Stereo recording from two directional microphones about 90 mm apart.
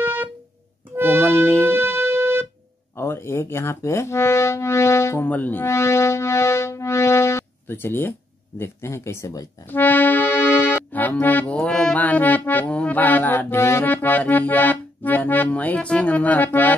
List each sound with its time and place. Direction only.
0.0 s music: 20° right (ahead or behind)
0.9 s accordion: 25° right (ahead or behind)
1.2 s music: 15° left (ahead or behind)
1.7 s music: 25° right (ahead or behind)
3.0 s speech: 30° left (ahead or behind)
5.3 s music: 20° left (ahead or behind)
5.7 s synthesizer: 30° left (ahead or behind)
8.5 s speech: 30° left (ahead or behind)
9.7 s accordion: 20° left (ahead or behind)
12.0 s music: 20° left (ahead or behind)